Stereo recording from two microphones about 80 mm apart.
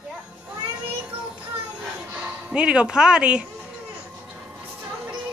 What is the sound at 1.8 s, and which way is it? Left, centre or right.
Music, centre.